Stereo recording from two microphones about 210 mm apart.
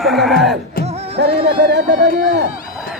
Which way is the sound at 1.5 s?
50° right (ahead or behind).